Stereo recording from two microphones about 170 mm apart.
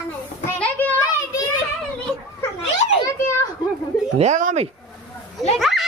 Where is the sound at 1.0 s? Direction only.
20° left (ahead or behind).